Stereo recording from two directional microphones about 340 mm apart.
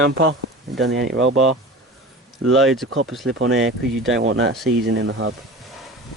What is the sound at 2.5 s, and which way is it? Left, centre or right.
Speech, centre.